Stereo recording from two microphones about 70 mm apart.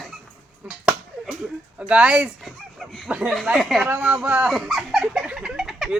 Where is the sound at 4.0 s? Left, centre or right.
Centre.